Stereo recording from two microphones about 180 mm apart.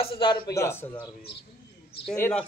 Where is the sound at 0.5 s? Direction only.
15° left (ahead or behind).